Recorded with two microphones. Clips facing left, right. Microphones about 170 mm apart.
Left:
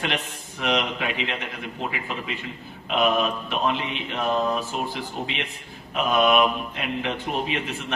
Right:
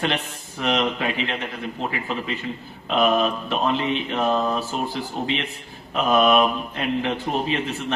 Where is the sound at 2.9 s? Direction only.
35° right (ahead or behind).